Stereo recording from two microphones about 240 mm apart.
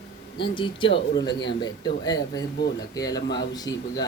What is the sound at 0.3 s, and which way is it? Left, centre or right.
Speech, centre.